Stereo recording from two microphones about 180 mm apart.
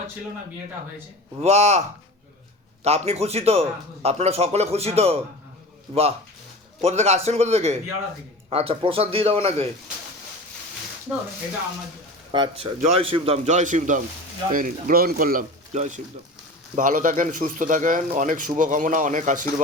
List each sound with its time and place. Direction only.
1.4 s a man's voice: 40° right (ahead or behind)
2.8 s a man's voice: 35° right (ahead or behind)
12.3 s a man's voice: 25° right (ahead or behind); by 19.6 s 45° right (ahead or behind)